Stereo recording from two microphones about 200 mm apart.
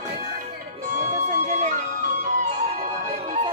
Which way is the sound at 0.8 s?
35° right (ahead or behind).